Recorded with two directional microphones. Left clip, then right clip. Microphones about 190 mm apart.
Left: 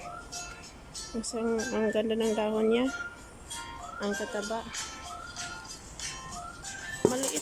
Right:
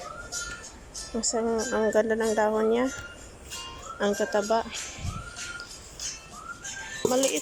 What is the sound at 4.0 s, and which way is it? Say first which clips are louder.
Speech: right 8 dB; 5° right (ahead or behind).